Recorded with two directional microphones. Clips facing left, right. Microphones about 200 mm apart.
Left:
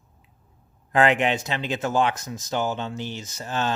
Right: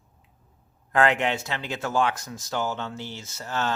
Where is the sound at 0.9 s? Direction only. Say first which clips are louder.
Left 2 dB; 20° left (ahead or behind).